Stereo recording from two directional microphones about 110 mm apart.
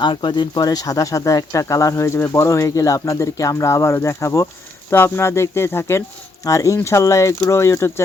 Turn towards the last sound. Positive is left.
turn(degrees=25)  # may be behind; listen again after turning